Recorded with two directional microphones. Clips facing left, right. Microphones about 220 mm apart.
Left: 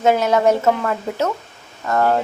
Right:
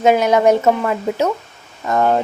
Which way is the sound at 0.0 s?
15° right (ahead or behind).